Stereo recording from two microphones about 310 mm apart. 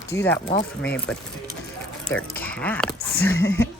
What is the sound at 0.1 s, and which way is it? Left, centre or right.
Speech, centre.